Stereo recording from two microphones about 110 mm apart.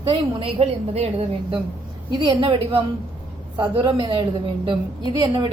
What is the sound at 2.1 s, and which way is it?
A woman's voice, 45° right (ahead or behind).